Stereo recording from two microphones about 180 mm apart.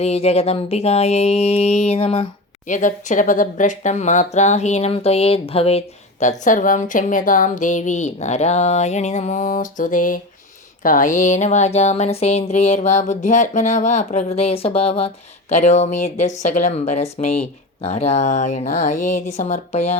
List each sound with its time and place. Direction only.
0.0 s speech: 35° left (ahead or behind)
2.6 s speech: 45° left (ahead or behind)